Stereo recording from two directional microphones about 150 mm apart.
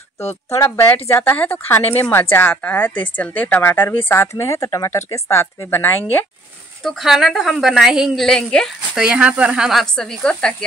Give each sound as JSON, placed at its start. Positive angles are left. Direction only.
{"t": 0.6, "sound": "speech", "side_deg": 15}
{"t": 6.8, "sound": "a woman's voice", "side_deg": 0}
{"t": 9.0, "sound": "a woman's voice", "side_deg": -5}